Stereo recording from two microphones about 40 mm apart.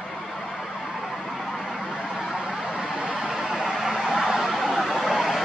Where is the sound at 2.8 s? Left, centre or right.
Right.